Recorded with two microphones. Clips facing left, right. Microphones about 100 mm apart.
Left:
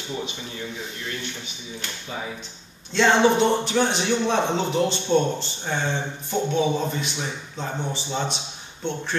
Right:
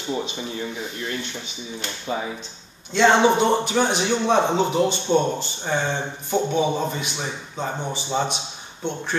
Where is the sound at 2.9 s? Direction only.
5° right (ahead or behind).